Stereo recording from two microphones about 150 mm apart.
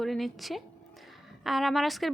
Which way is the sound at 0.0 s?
Centre (ahead or behind).